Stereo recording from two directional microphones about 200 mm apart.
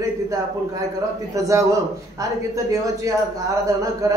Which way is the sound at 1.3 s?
15° right (ahead or behind).